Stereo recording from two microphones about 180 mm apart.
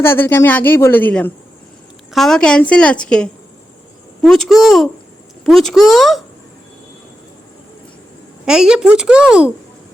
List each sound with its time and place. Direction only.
0.0 s a woman's voice: 10° left (ahead or behind)
8.4 s a woman's voice: 5° right (ahead or behind)